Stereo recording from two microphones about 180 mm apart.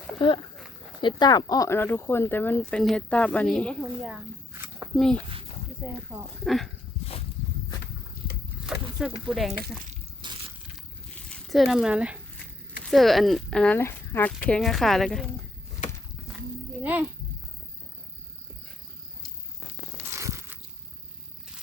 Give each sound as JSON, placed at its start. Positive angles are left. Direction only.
{"t": 0.2, "sound": "speech", "side_deg": 30}
{"t": 5.8, "sound": "speech", "side_deg": -10}
{"t": 8.6, "sound": "a sound", "side_deg": 0}
{"t": 10.2, "sound": "crushing", "side_deg": -25}
{"t": 11.3, "sound": "speech", "side_deg": 0}
{"t": 16.8, "sound": "speech", "side_deg": -10}
{"t": 20.0, "sound": "biting", "side_deg": -15}